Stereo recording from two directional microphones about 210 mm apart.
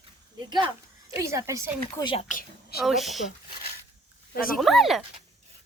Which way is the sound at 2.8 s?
Centre (ahead or behind).